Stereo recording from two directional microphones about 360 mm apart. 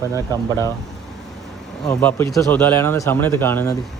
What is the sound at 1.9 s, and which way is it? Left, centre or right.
Speech, centre.